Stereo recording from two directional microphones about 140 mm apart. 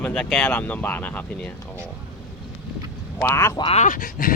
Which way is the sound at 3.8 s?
75° left (ahead or behind).